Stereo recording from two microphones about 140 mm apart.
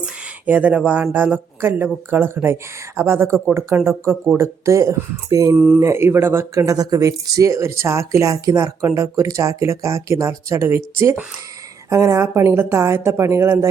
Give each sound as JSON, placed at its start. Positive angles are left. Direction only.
{"t": 0.4, "sound": "speech", "side_deg": -10}
{"t": 5.5, "sound": "speech", "side_deg": -5}
{"t": 5.8, "sound": "speech", "side_deg": -20}